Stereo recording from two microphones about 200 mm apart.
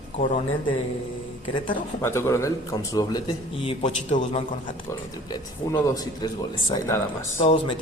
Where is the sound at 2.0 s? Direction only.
15° left (ahead or behind); by 4.4 s 30° left (ahead or behind).